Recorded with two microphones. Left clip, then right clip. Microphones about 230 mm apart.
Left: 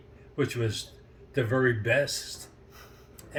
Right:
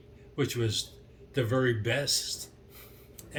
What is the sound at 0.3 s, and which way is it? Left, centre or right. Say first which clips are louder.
Speech: left 1 dB; centre.